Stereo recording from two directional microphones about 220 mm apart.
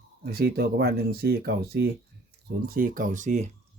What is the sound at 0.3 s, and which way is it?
Speech, 45° right (ahead or behind).